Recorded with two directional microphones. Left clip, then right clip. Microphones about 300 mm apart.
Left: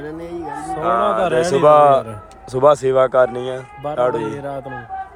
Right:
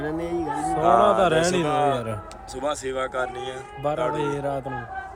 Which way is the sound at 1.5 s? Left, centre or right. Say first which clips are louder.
Left 12 dB; centre.